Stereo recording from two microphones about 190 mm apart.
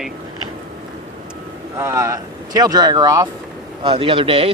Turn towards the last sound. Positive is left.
turn(degrees=-30)  # may be behind; listen again after turning